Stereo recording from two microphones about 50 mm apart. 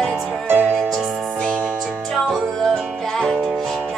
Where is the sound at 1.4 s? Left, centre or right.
Centre.